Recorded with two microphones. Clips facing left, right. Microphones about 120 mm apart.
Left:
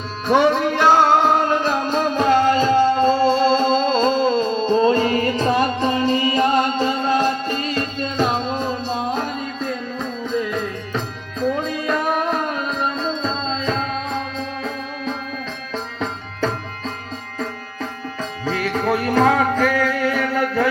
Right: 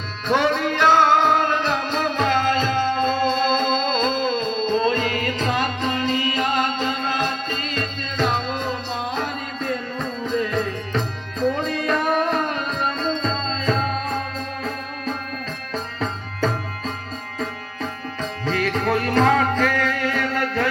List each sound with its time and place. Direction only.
0.3 s music: 10° left (ahead or behind)
3.0 s music: 30° left (ahead or behind); by 20.7 s 10° left (ahead or behind)